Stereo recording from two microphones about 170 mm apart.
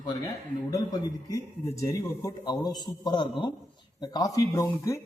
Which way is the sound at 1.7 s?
20° left (ahead or behind).